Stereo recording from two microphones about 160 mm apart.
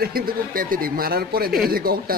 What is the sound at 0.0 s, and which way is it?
Speech, 65° right (ahead or behind).